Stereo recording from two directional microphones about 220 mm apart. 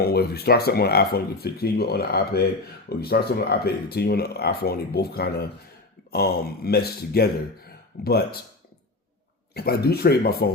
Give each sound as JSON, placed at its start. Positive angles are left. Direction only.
{"t": 0.0, "sound": "speech", "side_deg": 45}
{"t": 9.6, "sound": "speech", "side_deg": 45}